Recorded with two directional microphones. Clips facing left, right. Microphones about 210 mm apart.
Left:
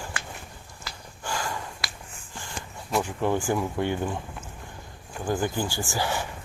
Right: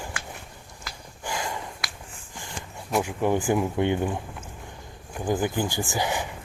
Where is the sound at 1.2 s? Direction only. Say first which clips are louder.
Even; 20° right (ahead or behind).